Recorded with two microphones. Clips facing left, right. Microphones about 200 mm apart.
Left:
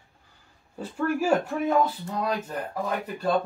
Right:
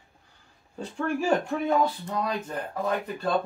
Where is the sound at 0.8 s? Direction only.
5° left (ahead or behind).